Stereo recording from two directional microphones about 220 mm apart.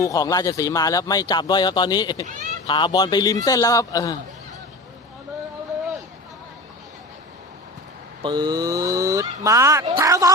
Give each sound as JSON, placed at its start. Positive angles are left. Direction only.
{"t": 0.0, "sound": "speech", "side_deg": 15}
{"t": 2.2, "sound": "speech", "side_deg": -35}
{"t": 2.6, "sound": "speech", "side_deg": 20}
{"t": 8.2, "sound": "speech", "side_deg": -20}